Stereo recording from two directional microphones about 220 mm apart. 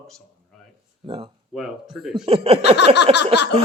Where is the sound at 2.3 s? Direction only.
25° right (ahead or behind).